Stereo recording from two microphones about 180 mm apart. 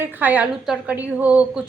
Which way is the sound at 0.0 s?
10° right (ahead or behind).